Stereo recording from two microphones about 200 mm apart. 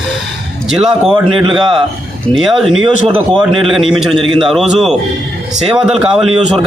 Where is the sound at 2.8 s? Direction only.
25° right (ahead or behind).